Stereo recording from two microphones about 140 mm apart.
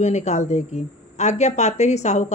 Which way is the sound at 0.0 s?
55° left (ahead or behind).